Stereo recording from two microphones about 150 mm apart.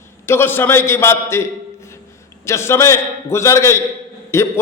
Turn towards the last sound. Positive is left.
turn(degrees=15)  # may be behind; listen again after turning